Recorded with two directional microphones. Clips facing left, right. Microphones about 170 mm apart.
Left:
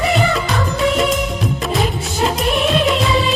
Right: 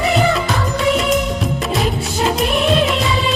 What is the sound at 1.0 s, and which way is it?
Music of bollywood, centre (ahead or behind).